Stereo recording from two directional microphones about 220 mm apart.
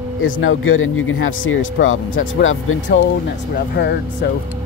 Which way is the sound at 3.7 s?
50° left (ahead or behind).